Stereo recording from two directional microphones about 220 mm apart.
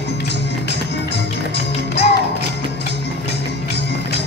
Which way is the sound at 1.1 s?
50° left (ahead or behind).